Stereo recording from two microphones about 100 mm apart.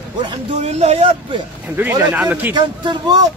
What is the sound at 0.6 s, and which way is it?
Speech, 90° right.